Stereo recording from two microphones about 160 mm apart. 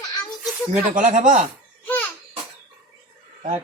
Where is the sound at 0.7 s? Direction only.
50° right (ahead or behind).